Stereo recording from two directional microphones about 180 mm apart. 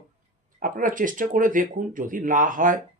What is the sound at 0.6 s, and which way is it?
Speech, 50° right (ahead or behind).